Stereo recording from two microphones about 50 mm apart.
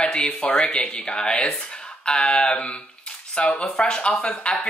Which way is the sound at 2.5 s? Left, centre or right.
Left.